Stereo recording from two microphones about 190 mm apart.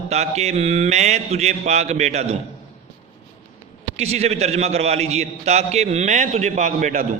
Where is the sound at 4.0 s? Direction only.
35° right (ahead or behind).